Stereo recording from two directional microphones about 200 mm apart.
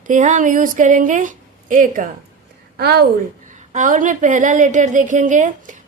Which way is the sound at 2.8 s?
55° right (ahead or behind).